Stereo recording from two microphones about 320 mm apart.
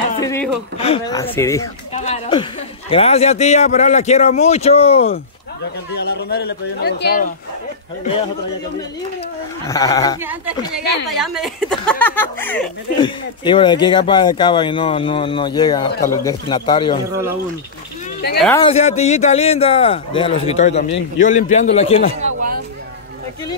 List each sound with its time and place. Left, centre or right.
0.2 s chuckle: centre
0.7 s speech: centre
2.0 s a man's voice: centre
5.9 s a man's voice: left
8.0 s speech: centre
9.7 s speech: centre
10.8 s a man's voice: left
11.2 s speech: centre
18.4 s speech: centre
18.7 s a man's voice: centre